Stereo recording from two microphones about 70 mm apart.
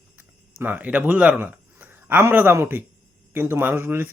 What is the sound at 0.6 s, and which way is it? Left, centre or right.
A man's voice, right.